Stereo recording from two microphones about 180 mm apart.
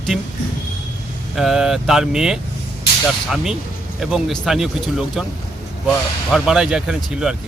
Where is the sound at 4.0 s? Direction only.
Centre (ahead or behind).